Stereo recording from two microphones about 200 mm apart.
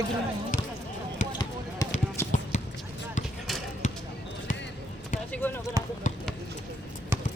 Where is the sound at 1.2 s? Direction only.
40° left (ahead or behind).